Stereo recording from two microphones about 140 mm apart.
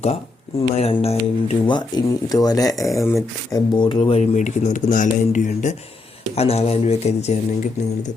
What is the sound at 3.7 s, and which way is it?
Speech, 35° left (ahead or behind).